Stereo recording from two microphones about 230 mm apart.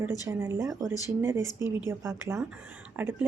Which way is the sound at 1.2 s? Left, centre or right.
Centre.